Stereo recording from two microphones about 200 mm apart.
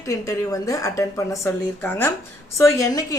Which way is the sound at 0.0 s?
15° left (ahead or behind).